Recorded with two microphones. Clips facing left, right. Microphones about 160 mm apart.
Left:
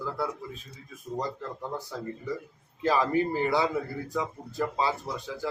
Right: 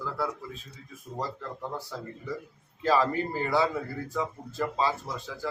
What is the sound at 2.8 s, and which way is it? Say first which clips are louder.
Speech: even; 15° left (ahead or behind).